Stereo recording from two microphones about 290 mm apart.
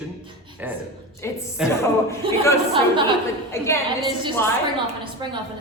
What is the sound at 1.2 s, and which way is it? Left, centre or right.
Speech, centre.